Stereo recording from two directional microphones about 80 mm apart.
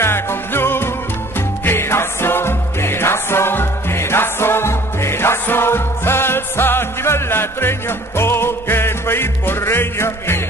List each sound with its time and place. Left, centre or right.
0.0 s music: left